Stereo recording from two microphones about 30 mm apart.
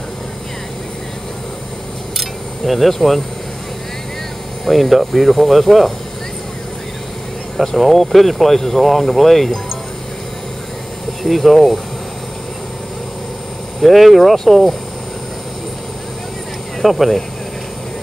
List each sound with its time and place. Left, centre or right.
2.1 s a sound: centre
4.6 s speech: centre
7.7 s speech: centre
8.8 s speech: centre
11.2 s speech: centre
13.7 s speech: centre
16.8 s speech: centre